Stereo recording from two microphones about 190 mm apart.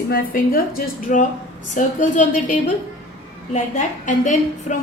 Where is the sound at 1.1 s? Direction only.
40° left (ahead or behind).